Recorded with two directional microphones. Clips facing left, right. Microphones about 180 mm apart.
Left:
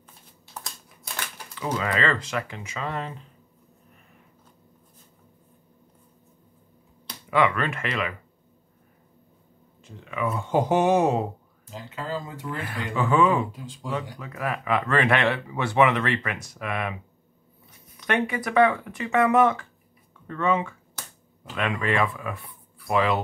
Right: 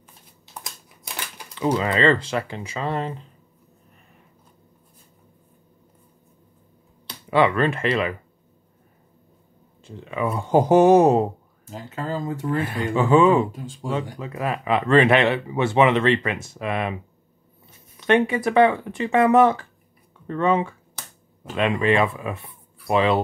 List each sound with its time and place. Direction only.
1.6 s speech: 25° right (ahead or behind)
7.2 s speech: 30° right (ahead or behind)
9.8 s speech: 30° right (ahead or behind); by 12.5 s 45° right (ahead or behind)
12.6 s speech: 25° right (ahead or behind)